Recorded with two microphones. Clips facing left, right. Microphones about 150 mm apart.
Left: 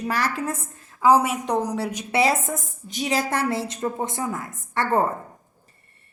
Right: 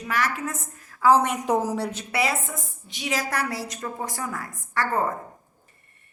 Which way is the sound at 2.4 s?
45° left (ahead or behind).